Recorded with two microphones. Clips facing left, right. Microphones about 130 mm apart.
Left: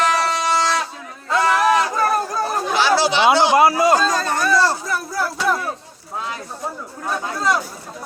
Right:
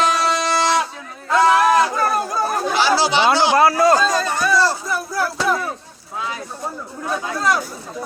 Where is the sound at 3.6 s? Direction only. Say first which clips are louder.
Even; 15° left (ahead or behind).